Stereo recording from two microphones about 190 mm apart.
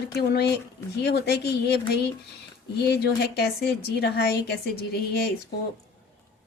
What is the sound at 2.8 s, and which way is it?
A woman's voice, 60° left (ahead or behind).